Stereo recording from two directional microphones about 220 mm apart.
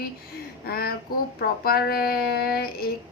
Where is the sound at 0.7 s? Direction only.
45° left (ahead or behind).